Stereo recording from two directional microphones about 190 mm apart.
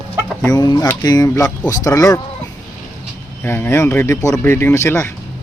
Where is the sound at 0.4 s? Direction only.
20° left (ahead or behind).